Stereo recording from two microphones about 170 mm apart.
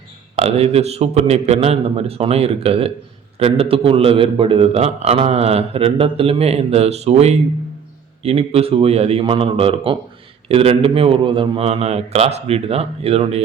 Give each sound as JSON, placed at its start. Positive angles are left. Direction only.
{"t": 0.3, "sound": "a man's voice", "side_deg": -40}